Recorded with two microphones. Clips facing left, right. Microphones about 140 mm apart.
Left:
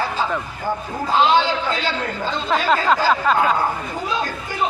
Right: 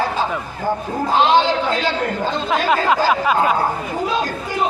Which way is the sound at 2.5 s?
10° right (ahead or behind).